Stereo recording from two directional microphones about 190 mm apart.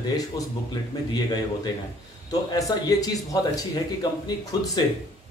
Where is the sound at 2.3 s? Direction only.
20° left (ahead or behind).